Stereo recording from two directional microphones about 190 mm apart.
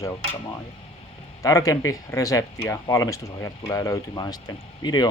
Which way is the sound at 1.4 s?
15° left (ahead or behind).